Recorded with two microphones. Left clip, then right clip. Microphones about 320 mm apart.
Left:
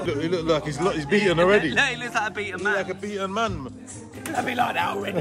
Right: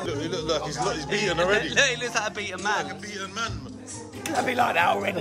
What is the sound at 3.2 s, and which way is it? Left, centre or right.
Speech, centre.